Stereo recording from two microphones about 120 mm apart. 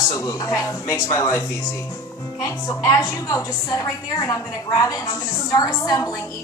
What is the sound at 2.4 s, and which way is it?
A woman's voice, 25° left (ahead or behind).